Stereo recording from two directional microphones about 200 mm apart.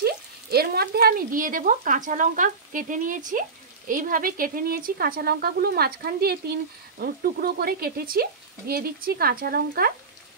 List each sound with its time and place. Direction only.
0.0 s speech: 50° right (ahead or behind)